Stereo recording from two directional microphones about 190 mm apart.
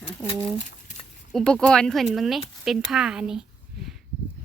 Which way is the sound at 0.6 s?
40° left (ahead or behind).